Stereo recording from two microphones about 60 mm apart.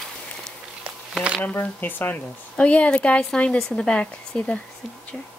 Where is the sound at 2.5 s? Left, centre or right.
Left.